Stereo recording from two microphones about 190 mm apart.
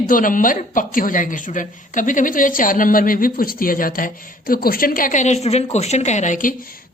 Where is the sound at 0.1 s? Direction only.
45° left (ahead or behind).